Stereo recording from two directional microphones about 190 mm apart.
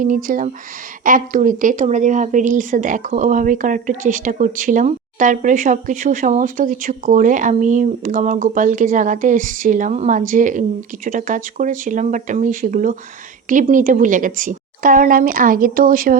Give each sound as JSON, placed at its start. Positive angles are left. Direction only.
{"t": 0.0, "sound": "a woman's voice", "side_deg": -45}